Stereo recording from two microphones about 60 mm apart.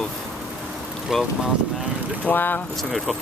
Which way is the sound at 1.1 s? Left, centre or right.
Centre.